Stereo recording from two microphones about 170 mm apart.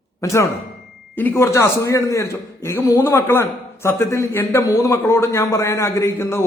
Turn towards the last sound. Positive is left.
turn(degrees=15)  # may be behind; listen again after turning